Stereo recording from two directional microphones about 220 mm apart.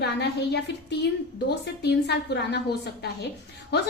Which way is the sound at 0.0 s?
50° left (ahead or behind).